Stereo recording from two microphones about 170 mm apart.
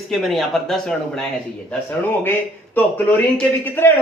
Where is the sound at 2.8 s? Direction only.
10° left (ahead or behind).